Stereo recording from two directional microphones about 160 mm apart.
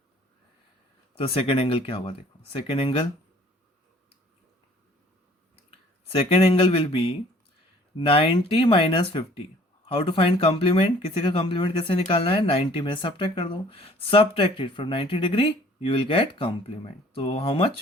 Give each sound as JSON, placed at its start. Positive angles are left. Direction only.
{"t": 1.2, "sound": "speech", "side_deg": 35}
{"t": 6.1, "sound": "speech", "side_deg": 35}